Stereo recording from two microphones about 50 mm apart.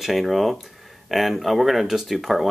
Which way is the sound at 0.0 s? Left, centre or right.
Centre.